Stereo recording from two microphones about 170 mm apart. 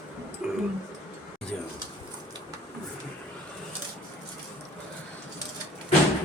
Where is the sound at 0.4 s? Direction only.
5° right (ahead or behind).